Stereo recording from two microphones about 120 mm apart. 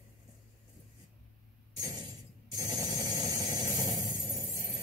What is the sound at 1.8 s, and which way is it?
Glass, 30° right (ahead or behind).